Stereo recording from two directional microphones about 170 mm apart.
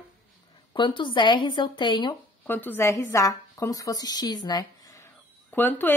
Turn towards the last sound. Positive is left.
turn(degrees=10)  # may be behind; listen again after turning